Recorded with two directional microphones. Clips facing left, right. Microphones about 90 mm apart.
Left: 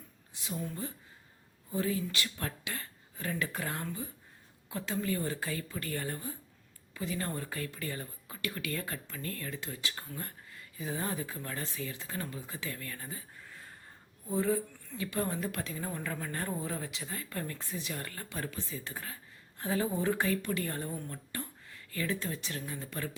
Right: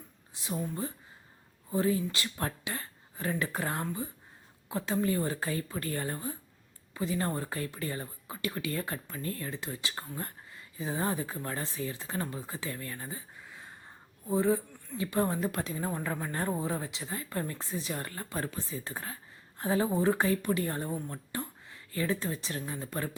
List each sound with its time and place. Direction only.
0.7 s speech: 35° right (ahead or behind)
13.4 s a sound: 15° right (ahead or behind)
14.3 s speech: 25° right (ahead or behind)